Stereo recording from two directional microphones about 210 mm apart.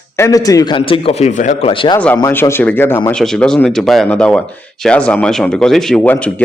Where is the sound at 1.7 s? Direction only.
25° left (ahead or behind).